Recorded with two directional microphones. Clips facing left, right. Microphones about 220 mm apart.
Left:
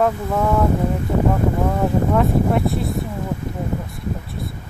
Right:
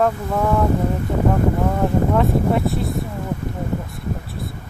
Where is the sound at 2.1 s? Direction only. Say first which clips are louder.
Even; centre (ahead or behind).